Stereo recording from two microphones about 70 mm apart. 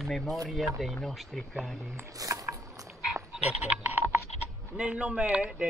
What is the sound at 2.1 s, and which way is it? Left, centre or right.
Dog, right.